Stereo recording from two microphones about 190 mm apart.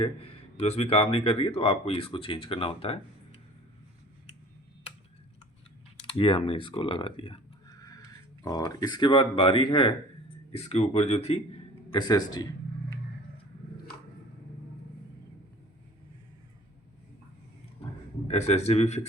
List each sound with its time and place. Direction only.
0.0 s speech: 30° left (ahead or behind)
6.0 s speech: 25° left (ahead or behind)
7.8 s a sound: 20° left (ahead or behind)
8.4 s speech: 20° left (ahead or behind)
11.9 s speech: 20° left (ahead or behind)
18.3 s speech: 35° left (ahead or behind)